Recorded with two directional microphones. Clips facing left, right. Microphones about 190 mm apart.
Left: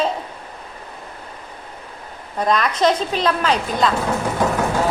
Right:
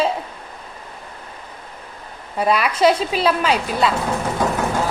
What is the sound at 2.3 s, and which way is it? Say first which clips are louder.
A woman's voice: right 1 dB; 10° right (ahead or behind).